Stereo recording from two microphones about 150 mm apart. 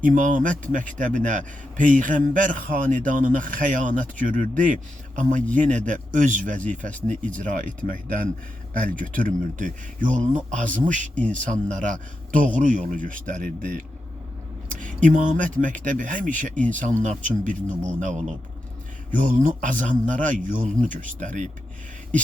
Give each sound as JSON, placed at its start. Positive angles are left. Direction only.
{"t": 0.0, "sound": "a man's voice", "side_deg": -60}
{"t": 11.1, "sound": "speech", "side_deg": 10}
{"t": 11.3, "sound": "a man's voice", "side_deg": -55}